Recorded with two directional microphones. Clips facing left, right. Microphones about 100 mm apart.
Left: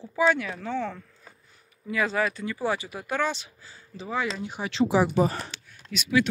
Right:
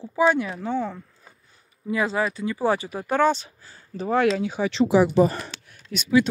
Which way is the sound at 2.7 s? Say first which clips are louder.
Right 6 dB; 35° right (ahead or behind).